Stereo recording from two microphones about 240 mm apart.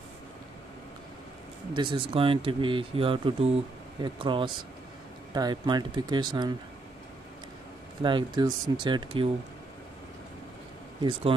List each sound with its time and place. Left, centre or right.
1.7 s speech: centre
8.0 s speech: centre
11.0 s speech: right